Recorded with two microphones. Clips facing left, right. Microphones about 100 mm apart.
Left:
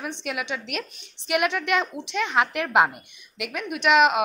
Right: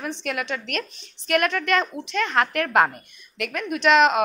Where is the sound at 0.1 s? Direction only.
10° left (ahead or behind).